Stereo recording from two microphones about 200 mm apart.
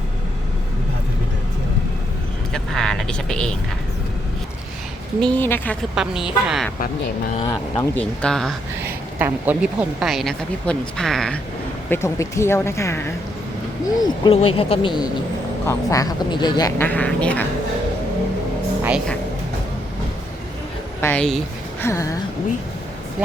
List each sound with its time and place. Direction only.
2.5 s vehicle: centre (ahead or behind)
5.2 s speech: 10° left (ahead or behind)
5.9 s a woman's voice: 5° right (ahead or behind)
7.8 s a woman's voice: 5° left (ahead or behind)
8.8 s a woman's voice: 10° right (ahead or behind)
11.9 s speech: 15° left (ahead or behind)
14.0 s speech: 25° left (ahead or behind); by 17.4 s 5° left (ahead or behind)
18.8 s music: 5° right (ahead or behind)
21.0 s speech: 10° left (ahead or behind)
21.8 s speech: 15° left (ahead or behind)